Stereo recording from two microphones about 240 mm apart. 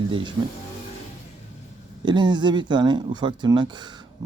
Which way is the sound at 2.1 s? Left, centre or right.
Centre.